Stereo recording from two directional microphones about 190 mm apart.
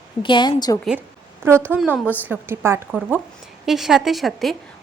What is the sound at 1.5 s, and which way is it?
A woman's voice, 10° right (ahead or behind).